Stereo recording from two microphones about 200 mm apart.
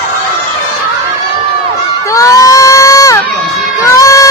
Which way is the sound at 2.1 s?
15° left (ahead or behind).